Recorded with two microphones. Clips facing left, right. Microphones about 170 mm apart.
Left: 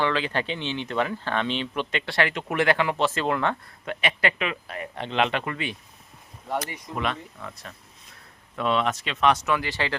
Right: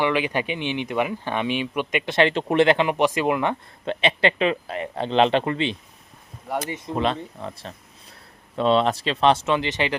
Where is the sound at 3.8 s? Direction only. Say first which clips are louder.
Right 5 dB; 25° right (ahead or behind).